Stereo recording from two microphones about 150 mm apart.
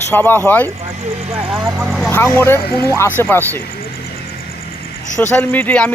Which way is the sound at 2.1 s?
15° left (ahead or behind).